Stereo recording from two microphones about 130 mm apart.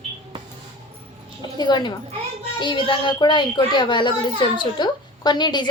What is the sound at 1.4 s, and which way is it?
A child's voice, 35° left (ahead or behind).